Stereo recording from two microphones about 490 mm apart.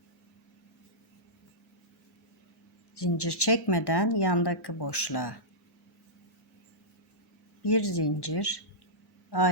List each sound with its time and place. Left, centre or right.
2.9 s speech: left
7.6 s speech: left